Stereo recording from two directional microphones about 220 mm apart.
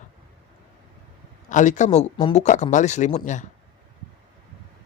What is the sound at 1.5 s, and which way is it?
Speech, 35° left (ahead or behind).